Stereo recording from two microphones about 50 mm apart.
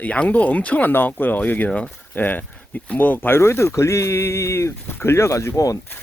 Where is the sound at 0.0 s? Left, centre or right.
Left.